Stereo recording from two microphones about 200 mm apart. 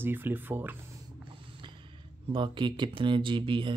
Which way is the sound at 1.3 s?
25° right (ahead or behind).